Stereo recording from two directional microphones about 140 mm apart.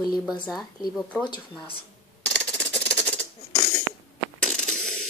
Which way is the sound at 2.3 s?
10° left (ahead or behind).